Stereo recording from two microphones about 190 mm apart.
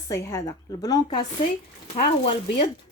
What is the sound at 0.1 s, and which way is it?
Speech, 15° left (ahead or behind).